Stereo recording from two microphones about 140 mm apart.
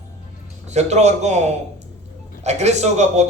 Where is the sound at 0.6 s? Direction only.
50° right (ahead or behind).